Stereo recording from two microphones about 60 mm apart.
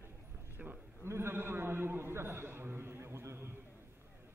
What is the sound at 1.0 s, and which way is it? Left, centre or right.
A man's voice, right.